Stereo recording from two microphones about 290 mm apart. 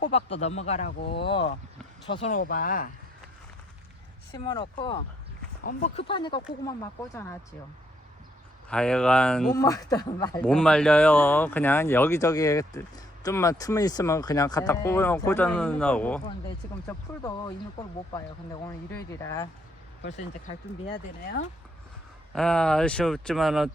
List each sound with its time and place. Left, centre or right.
0.0 s speech: left
1.2 s speech: centre
4.3 s speech: centre
8.7 s speech: centre
18.6 s speech: centre
22.3 s speech: centre